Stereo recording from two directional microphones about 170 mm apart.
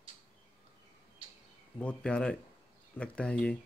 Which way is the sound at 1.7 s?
5° left (ahead or behind).